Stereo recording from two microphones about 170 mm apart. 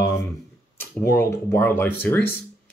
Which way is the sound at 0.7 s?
15° left (ahead or behind).